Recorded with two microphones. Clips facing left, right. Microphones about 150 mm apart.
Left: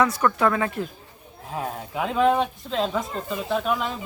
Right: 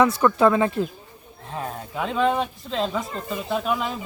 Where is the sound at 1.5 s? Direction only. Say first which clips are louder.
Left 1 dB; 5° left (ahead or behind).